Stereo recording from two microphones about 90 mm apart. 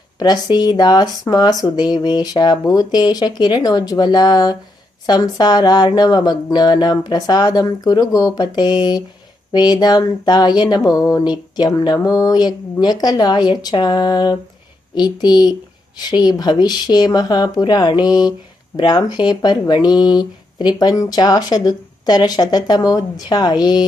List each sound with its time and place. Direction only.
0.2 s speech: 50° left (ahead or behind)